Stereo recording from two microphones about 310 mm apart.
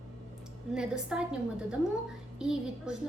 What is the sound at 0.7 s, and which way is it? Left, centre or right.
Speech, centre.